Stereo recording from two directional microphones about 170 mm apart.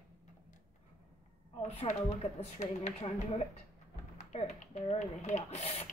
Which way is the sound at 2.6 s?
40° left (ahead or behind).